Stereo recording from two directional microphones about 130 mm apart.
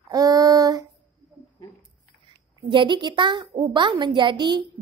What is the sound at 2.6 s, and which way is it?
A woman's voice, 35° right (ahead or behind).